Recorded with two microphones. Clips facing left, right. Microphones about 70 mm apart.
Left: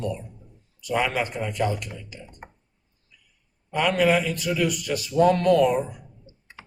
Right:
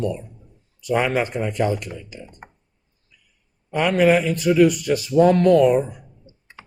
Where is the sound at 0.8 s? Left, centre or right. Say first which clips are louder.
Right 4 dB; right.